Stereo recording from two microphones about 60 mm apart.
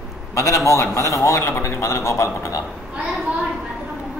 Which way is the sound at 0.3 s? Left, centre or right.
Left.